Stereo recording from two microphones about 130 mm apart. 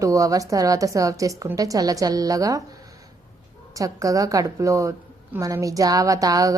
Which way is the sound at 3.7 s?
25° right (ahead or behind).